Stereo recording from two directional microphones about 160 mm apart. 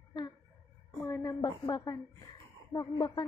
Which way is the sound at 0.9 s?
15° left (ahead or behind).